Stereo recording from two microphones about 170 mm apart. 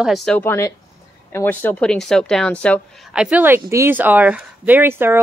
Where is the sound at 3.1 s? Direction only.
5° right (ahead or behind).